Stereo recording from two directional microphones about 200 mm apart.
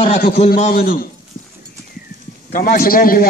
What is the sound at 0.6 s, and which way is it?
Speech, 45° left (ahead or behind).